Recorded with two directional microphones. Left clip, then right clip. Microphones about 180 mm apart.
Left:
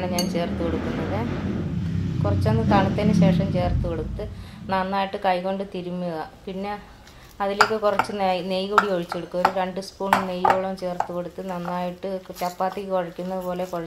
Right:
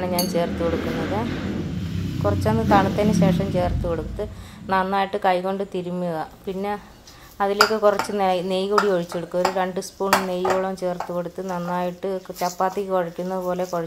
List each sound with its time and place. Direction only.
0.0 s dishes: 35° right (ahead or behind)
2.2 s dishes: 30° right (ahead or behind)